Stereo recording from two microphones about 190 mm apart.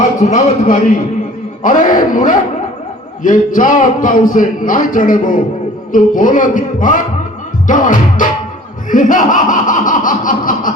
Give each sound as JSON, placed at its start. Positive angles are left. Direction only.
{"t": 0.2, "sound": "speech", "side_deg": 40}